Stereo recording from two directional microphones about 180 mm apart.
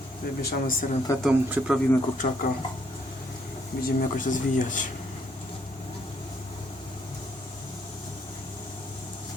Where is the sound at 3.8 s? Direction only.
45° left (ahead or behind).